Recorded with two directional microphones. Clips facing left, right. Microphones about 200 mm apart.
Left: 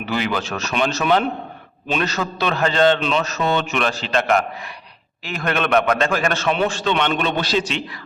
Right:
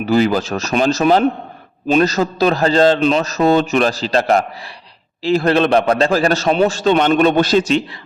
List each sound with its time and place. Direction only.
0.0 s a man's voice: 40° right (ahead or behind)